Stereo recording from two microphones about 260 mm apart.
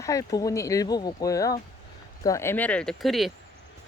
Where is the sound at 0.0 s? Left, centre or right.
Centre.